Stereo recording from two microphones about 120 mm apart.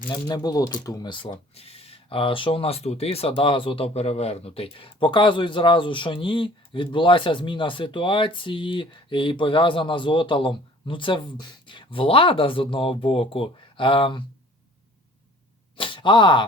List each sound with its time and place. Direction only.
0.1 s speech: 40° left (ahead or behind)
1.6 s speech: 55° left (ahead or behind)
15.8 s a sound: 40° left (ahead or behind)